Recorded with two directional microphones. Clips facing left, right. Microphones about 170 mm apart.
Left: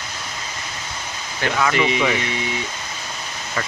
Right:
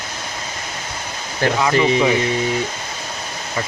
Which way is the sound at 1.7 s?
35° right (ahead or behind).